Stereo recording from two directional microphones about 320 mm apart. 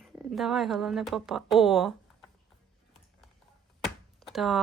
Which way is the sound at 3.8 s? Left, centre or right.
Centre.